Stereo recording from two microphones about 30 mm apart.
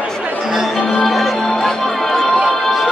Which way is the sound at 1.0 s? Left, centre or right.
Centre.